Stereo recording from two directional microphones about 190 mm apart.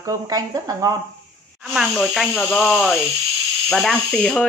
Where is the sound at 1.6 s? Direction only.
Centre (ahead or behind).